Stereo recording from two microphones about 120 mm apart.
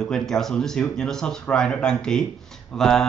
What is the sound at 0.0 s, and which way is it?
A man's voice, 5° left (ahead or behind).